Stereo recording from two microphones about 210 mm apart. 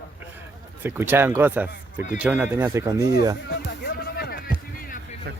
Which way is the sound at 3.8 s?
50° left (ahead or behind).